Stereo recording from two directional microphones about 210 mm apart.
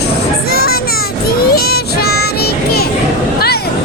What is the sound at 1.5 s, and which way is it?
Child singing, 45° left (ahead or behind).